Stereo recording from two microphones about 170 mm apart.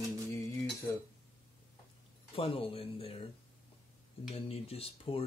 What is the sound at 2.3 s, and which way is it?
Speech, 30° left (ahead or behind).